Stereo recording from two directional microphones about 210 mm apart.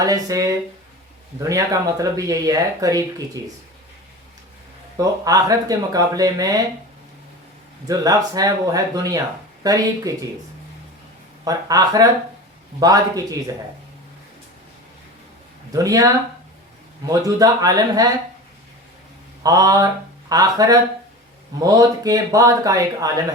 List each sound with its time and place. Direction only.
0.0 s speech: 15° right (ahead or behind)
4.9 s speech: 15° right (ahead or behind)
7.9 s speech: 15° right (ahead or behind)
11.4 s speech: 15° right (ahead or behind)
15.7 s speech: 15° right (ahead or behind)
17.1 s speech: 15° right (ahead or behind)
19.4 s speech: 15° right (ahead or behind)